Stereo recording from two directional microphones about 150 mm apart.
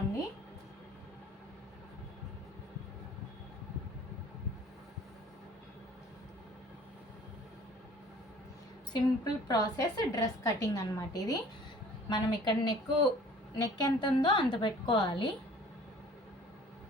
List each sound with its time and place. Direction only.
8.9 s a woman's voice: 25° left (ahead or behind)